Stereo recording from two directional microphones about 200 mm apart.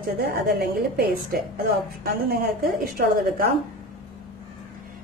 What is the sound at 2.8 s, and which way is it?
Speech, 45° right (ahead or behind).